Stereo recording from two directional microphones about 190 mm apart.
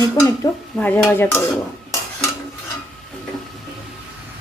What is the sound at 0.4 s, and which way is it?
Stir, 20° left (ahead or behind).